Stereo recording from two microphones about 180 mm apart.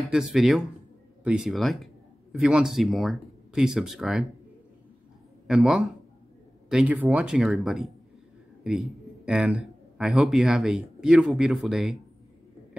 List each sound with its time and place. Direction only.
0.1 s speech: 5° right (ahead or behind)
5.5 s a man's voice: centre (ahead or behind)